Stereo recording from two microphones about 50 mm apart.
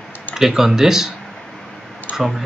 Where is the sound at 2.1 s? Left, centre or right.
Centre.